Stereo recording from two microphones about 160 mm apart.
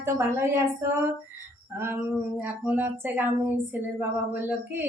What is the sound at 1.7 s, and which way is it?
A woman's voice, 15° right (ahead or behind).